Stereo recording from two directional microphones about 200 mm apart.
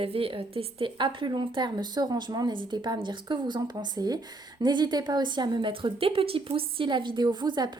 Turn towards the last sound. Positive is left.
turn(degrees=-20)  # may be behind; listen again after turning